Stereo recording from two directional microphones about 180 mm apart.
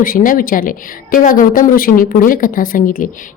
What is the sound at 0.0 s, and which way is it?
A woman's voice, 50° left (ahead or behind).